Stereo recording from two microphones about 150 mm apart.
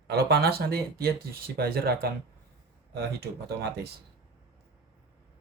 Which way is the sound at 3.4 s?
90° right.